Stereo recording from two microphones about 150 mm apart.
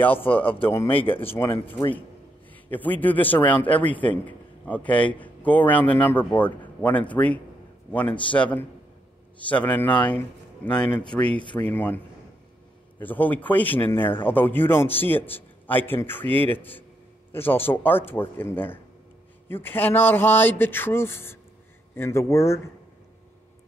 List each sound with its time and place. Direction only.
0.0 s speech: 10° left (ahead or behind)
1.0 s speech: 35° left (ahead or behind)
2.5 s a man's voice: 10° left (ahead or behind)
13.0 s speech: 10° left (ahead or behind)